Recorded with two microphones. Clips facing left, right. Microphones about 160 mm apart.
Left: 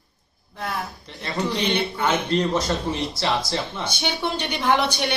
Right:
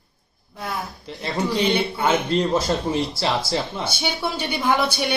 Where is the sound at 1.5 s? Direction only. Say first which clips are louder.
Right 4 dB; 10° right (ahead or behind).